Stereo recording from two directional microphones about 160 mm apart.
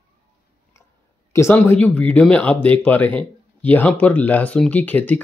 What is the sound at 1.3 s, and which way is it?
Speech, 15° left (ahead or behind).